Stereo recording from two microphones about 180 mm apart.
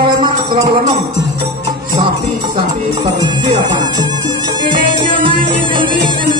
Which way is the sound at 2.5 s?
25° right (ahead or behind).